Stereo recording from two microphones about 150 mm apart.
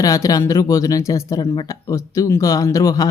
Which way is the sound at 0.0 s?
25° left (ahead or behind).